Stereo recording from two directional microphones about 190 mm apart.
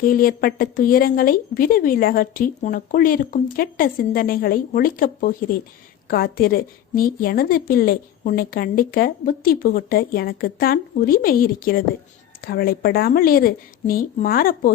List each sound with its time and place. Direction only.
0.0 s a woman's voice: 50° left (ahead or behind)